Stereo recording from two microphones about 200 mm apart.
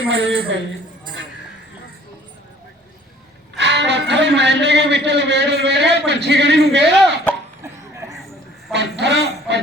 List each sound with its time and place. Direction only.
0.1 s a man's voice: 65° right (ahead or behind)
3.6 s a man's voice: 60° right (ahead or behind)
6.8 s speech: centre (ahead or behind)
7.6 s a sound: 15° right (ahead or behind)
8.7 s speech: 60° right (ahead or behind)